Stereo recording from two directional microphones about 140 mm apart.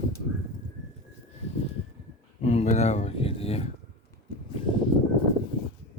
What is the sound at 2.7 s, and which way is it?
Speech, 50° left (ahead or behind).